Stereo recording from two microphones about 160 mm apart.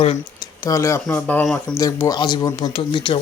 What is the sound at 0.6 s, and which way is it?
Speech, 20° left (ahead or behind).